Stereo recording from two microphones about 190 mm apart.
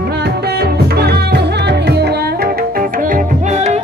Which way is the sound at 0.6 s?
60° right (ahead or behind).